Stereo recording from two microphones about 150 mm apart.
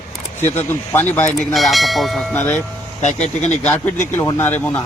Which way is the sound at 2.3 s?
15° left (ahead or behind).